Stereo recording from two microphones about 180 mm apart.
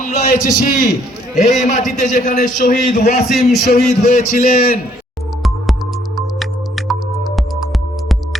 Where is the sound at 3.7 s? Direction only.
40° left (ahead or behind).